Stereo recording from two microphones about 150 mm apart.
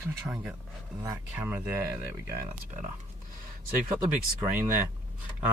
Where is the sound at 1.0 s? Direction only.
15° right (ahead or behind).